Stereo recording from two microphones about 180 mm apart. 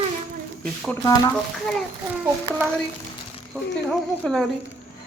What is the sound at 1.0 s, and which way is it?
Speech, 20° left (ahead or behind).